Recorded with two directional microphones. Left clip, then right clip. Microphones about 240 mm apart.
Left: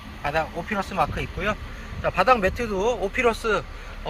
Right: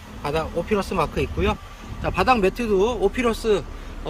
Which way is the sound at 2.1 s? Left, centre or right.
Centre.